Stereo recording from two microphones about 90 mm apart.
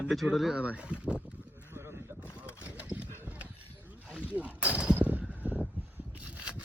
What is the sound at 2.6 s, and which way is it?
Clip-clop, 15° right (ahead or behind).